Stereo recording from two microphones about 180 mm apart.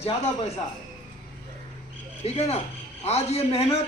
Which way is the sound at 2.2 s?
35° left (ahead or behind).